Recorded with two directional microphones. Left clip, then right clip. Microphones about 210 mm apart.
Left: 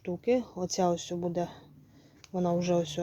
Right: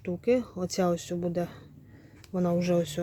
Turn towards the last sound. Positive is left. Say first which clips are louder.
# right 1 dB
turn(degrees=0)  # may be behind; listen again after turning